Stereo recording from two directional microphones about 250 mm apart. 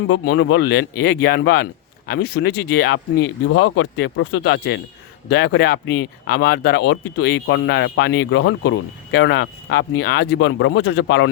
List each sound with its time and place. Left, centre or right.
0.1 s speech: left